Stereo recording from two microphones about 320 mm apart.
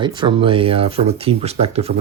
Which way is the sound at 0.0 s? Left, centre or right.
Centre.